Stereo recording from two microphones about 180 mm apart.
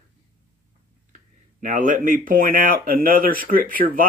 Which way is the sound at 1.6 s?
45° right (ahead or behind).